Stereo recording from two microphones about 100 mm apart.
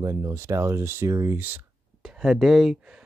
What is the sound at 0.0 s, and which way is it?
Speech, 35° right (ahead or behind).